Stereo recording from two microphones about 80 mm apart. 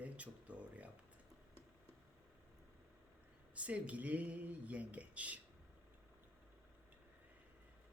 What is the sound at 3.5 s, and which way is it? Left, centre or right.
Speech, centre.